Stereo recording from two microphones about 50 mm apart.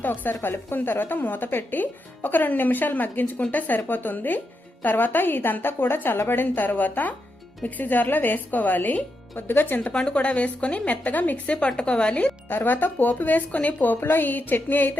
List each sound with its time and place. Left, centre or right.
0.0 s a woman's voice: left
9.9 s a woman's voice: centre
12.5 s a woman's voice: left